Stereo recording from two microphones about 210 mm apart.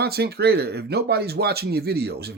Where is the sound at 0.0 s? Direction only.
50° right (ahead or behind).